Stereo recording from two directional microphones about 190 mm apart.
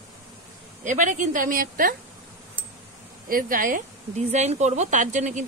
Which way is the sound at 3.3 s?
45° right (ahead or behind).